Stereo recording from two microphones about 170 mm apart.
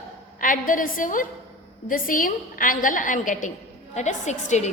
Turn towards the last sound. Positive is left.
turn(degrees=45)  # may be behind; listen again after turning